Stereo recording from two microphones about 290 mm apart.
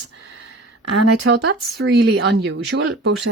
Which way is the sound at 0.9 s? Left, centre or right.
Right.